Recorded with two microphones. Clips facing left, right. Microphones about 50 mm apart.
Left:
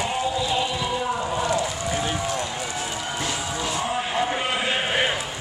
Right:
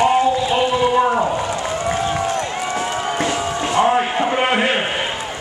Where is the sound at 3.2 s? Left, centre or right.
Right.